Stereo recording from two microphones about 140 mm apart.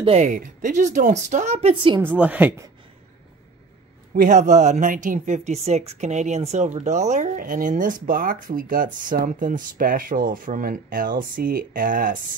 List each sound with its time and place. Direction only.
0.2 s speech: 65° right (ahead or behind); by 2.0 s 40° right (ahead or behind)
2.0 s a woman's voice: 10° right (ahead or behind)
4.1 s a woman's voice: 75° right (ahead or behind)